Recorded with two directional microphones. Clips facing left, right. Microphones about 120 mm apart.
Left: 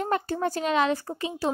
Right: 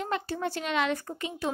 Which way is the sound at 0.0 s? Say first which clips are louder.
Left 5 dB; 45° left (ahead or behind).